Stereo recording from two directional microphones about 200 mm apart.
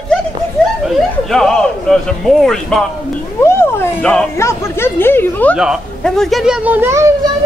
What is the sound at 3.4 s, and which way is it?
Speech, 10° left (ahead or behind).